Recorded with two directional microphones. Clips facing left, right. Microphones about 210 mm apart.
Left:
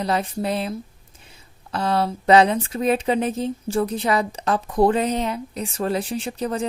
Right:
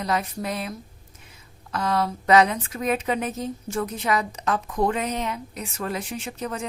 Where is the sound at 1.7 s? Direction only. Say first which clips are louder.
Left 3 dB; 30° left (ahead or behind).